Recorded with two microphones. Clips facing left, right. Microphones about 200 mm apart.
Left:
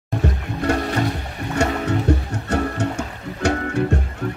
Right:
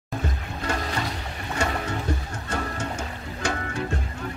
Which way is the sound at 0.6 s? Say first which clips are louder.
Left 8 dB; 65° left (ahead or behind).